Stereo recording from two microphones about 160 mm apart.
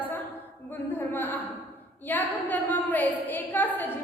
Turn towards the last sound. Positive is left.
turn(degrees=10)  # may be behind; listen again after turning